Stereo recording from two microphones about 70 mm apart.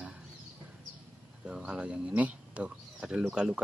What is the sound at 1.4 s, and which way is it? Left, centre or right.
Speech, centre.